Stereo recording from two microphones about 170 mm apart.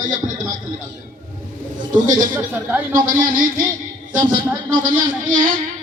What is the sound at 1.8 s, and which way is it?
A man's voice, 50° right (ahead or behind).